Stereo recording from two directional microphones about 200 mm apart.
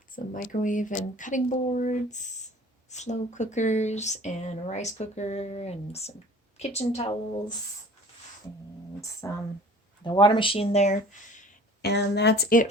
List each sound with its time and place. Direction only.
0.3 s speech: 40° left (ahead or behind)
9.2 s speech: 15° left (ahead or behind); by 11.4 s 40° left (ahead or behind)
11.8 s speech: 55° left (ahead or behind)